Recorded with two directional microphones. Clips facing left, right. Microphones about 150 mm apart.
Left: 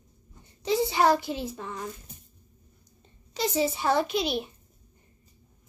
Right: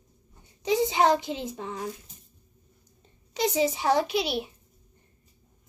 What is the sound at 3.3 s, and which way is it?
A woman's voice, 15° right (ahead or behind).